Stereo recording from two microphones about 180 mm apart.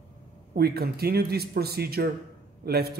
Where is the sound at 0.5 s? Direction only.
60° right (ahead or behind).